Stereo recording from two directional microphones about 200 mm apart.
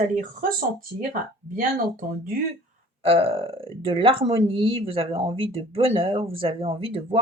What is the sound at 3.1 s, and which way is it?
Speech, 25° right (ahead or behind).